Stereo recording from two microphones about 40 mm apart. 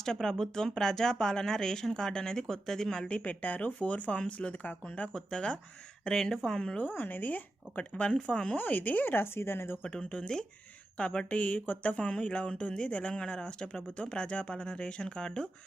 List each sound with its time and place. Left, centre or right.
0.0 s speech: centre
3.1 s speech: left
5.1 s speech: centre
6.9 s speech: left
8.0 s speech: left
8.5 s speech: left
9.1 s a woman's voice: left
9.8 s speech: centre
11.3 s speech: left
11.9 s speech: left